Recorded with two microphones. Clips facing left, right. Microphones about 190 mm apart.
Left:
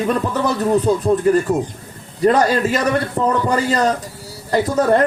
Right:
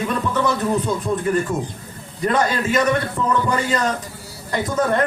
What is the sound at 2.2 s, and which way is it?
Speech, 35° left (ahead or behind).